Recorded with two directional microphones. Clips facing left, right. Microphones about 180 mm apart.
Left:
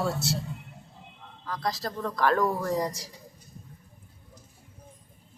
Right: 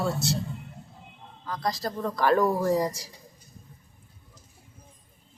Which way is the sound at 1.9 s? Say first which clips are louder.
Right 2 dB; 10° right (ahead or behind).